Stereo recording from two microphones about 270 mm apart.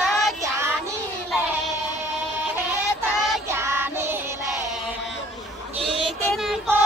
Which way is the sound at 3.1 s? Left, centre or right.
Centre.